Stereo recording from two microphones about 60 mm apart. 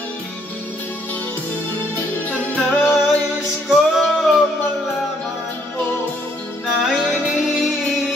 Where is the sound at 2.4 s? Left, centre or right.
Left.